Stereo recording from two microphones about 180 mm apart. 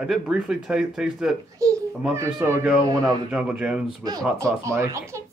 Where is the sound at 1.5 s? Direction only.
15° right (ahead or behind).